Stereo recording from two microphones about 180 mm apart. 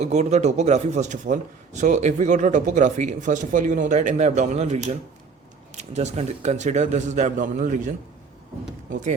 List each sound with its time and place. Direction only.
0.0 s speech: 40° right (ahead or behind)
8.9 s speech: 45° right (ahead or behind)